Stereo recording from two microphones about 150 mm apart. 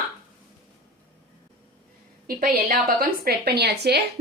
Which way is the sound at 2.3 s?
75° right (ahead or behind).